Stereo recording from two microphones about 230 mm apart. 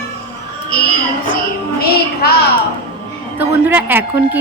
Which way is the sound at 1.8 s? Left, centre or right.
Left.